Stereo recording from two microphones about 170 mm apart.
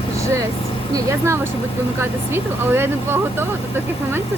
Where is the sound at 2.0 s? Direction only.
15° right (ahead or behind).